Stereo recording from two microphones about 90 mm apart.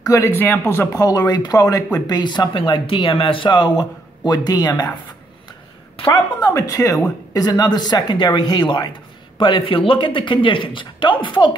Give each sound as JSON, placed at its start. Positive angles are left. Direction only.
{"t": 0.0, "sound": "speech", "side_deg": 40}
{"t": 0.4, "sound": "speech", "side_deg": 25}
{"t": 0.9, "sound": "speech", "side_deg": 45}
{"t": 1.6, "sound": "a woman's voice", "side_deg": 35}
{"t": 2.0, "sound": "speech", "side_deg": 50}
{"t": 6.1, "sound": "a woman's voice", "side_deg": 35}
{"t": 9.4, "sound": "a man's voice", "side_deg": 75}